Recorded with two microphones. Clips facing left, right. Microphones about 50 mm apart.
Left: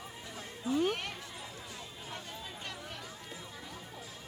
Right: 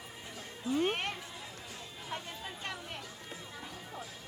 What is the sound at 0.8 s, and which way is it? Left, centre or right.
Music, right.